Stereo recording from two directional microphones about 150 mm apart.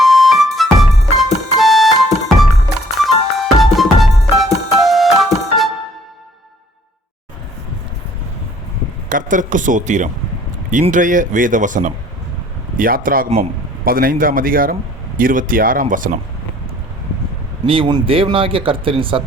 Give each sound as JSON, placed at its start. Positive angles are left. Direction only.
{"t": 0.0, "sound": "music", "side_deg": 0}
{"t": 3.0, "sound": "music", "side_deg": 0}
{"t": 9.0, "sound": "a man's voice", "side_deg": -60}
{"t": 17.7, "sound": "speech", "side_deg": -35}